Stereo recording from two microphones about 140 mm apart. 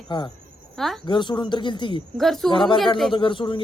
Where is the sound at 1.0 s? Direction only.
35° left (ahead or behind).